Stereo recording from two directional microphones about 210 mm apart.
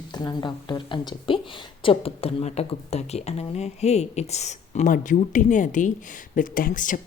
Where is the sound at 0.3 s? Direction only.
20° left (ahead or behind).